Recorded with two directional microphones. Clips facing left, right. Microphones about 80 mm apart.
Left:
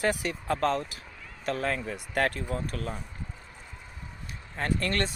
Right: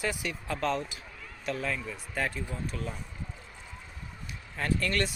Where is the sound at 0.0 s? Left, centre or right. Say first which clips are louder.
Left 5 dB; left.